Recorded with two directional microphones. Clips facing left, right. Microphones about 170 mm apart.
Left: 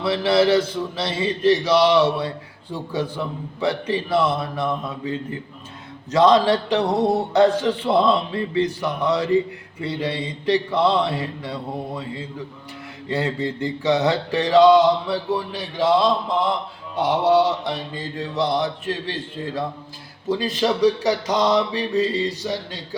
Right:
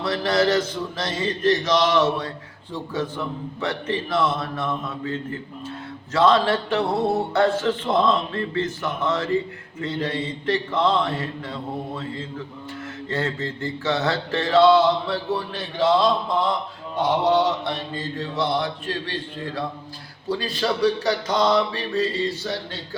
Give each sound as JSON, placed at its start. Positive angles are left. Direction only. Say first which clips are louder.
{"t": 0.0, "sound": "mantra", "louder": "left 3 dB", "side_deg": 10}
{"t": 20.2, "sound": "mantra", "louder": "left 3 dB", "side_deg": 20}